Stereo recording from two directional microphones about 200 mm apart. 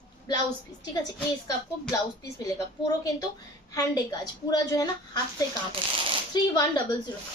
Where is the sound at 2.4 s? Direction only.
15° left (ahead or behind).